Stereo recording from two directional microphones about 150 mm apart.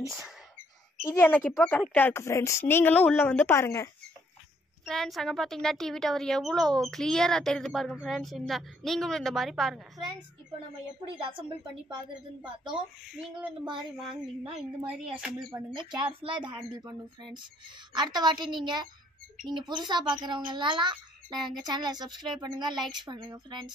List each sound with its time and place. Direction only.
1.0 s speech: 15° left (ahead or behind)
4.8 s speech: centre (ahead or behind)
11.1 s a woman's voice: 35° right (ahead or behind)
15.1 s speech: 5° right (ahead or behind)
15.5 s a woman's voice: 30° right (ahead or behind)